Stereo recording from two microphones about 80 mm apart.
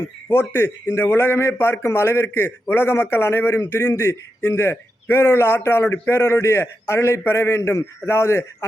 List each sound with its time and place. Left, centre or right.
0.3 s a man's voice: left